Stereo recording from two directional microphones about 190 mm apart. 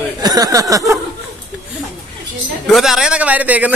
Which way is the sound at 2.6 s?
Centre (ahead or behind).